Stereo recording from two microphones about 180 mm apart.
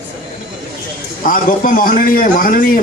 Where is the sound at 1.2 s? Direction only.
50° left (ahead or behind).